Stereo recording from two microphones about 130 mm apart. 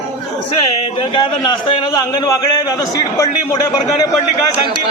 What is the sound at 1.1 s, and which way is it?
A man's voice, 35° left (ahead or behind).